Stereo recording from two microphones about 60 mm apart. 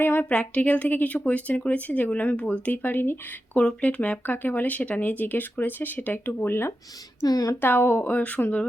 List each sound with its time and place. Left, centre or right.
0.0 s speech: left
3.6 s speech: centre; by 6.7 s left
7.2 s speech: left
7.6 s speech: left
8.1 s speech: left